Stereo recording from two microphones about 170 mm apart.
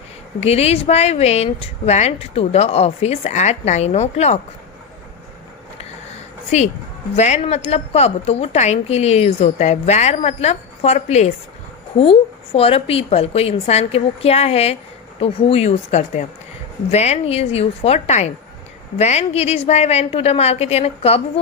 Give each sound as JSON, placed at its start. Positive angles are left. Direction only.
{"t": 0.3, "sound": "a woman's voice", "side_deg": 40}
{"t": 7.2, "sound": "a woman's voice", "side_deg": 40}
{"t": 12.5, "sound": "a woman's voice", "side_deg": 35}